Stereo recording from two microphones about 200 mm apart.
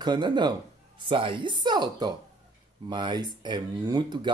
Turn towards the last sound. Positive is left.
turn(degrees=-20)  # may be behind; listen again after turning